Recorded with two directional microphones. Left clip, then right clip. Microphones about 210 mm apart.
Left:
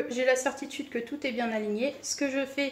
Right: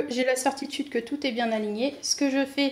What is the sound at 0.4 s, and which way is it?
A woman's voice, 45° right (ahead or behind).